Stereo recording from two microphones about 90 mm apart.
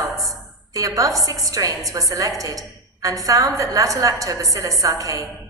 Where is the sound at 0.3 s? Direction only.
40° right (ahead or behind).